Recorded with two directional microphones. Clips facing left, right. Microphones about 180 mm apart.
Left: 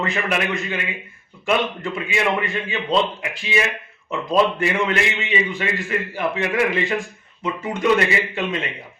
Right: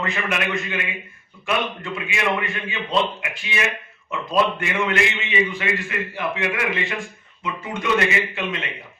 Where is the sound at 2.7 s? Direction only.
35° left (ahead or behind).